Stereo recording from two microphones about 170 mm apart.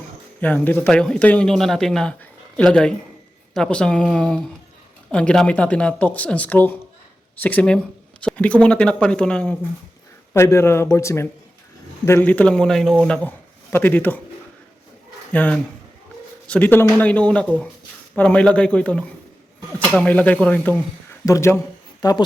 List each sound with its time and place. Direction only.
0.4 s a man's voice: 10° left (ahead or behind)
15.3 s a man's voice: 10° left (ahead or behind)